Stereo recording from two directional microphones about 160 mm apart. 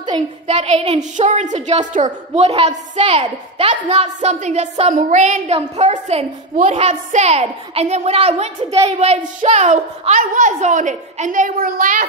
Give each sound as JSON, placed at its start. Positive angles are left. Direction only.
{"t": 0.5, "sound": "a woman's voice", "side_deg": -40}